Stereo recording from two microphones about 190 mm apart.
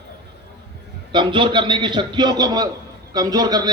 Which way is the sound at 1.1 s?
25° right (ahead or behind).